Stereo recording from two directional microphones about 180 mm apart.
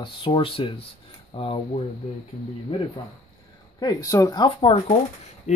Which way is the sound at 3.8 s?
20° left (ahead or behind).